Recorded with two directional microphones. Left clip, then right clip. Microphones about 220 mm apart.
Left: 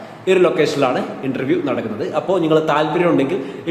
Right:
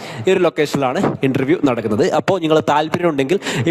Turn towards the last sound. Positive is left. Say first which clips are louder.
# left 1 dB
turn(degrees=-50)  # may be behind; listen again after turning